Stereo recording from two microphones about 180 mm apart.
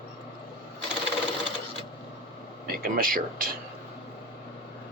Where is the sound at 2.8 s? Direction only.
50° right (ahead or behind).